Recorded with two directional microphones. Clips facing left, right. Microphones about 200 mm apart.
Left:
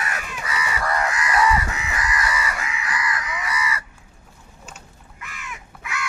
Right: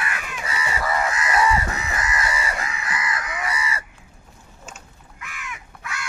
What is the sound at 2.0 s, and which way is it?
Chicken, 25° right (ahead or behind).